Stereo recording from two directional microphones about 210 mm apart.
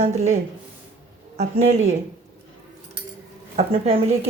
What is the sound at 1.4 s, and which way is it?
Speech, 30° right (ahead or behind).